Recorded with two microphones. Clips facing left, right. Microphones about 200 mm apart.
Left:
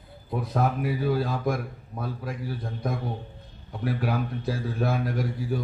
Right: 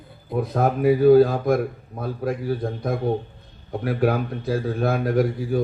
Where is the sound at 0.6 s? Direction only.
55° right (ahead or behind).